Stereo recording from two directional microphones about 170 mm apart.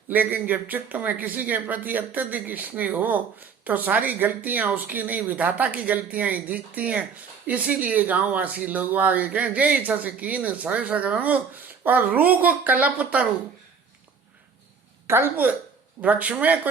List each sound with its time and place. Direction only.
0.1 s speech: 10° right (ahead or behind)
15.0 s speech: 15° right (ahead or behind)